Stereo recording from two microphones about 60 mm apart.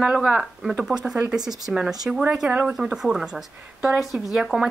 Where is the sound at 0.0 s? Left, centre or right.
Centre.